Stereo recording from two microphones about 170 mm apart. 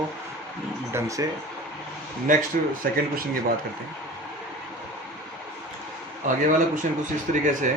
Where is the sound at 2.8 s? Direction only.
55° right (ahead or behind).